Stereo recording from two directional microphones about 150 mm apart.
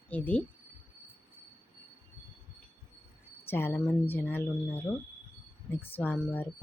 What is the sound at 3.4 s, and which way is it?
Speech, 15° left (ahead or behind).